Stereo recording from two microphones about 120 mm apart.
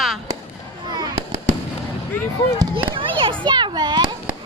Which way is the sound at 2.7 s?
45° right (ahead or behind).